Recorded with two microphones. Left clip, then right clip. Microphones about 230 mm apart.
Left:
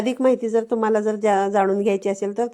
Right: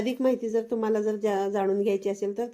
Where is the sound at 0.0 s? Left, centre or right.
Left.